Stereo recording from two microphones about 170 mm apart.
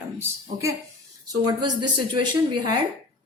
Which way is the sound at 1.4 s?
25° right (ahead or behind).